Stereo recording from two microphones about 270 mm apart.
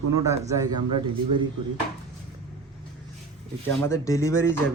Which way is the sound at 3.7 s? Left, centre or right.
Centre.